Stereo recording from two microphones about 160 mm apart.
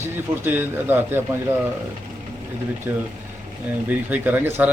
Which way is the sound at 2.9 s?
10° right (ahead or behind).